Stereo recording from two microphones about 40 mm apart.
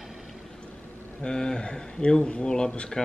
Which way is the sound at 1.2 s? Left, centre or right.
Left.